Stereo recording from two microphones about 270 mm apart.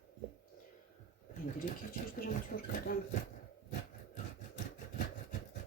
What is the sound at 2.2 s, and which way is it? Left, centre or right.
Speech, left.